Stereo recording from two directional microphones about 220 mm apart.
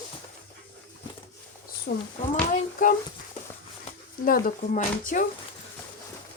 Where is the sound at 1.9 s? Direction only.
50° left (ahead or behind).